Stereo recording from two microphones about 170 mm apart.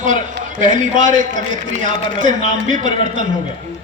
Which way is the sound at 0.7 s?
50° right (ahead or behind).